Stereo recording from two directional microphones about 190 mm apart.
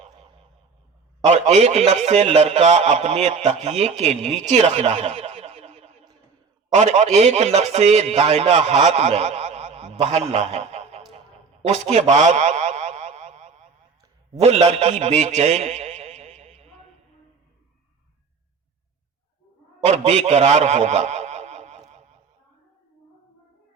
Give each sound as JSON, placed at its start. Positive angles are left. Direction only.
{"t": 1.2, "sound": "a man's voice", "side_deg": -35}
{"t": 11.6, "sound": "a sound", "side_deg": -35}
{"t": 14.3, "sound": "a man's voice", "side_deg": -35}
{"t": 19.8, "sound": "a man's voice", "side_deg": -35}